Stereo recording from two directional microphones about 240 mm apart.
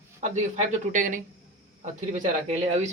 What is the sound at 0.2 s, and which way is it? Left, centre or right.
Speech, right.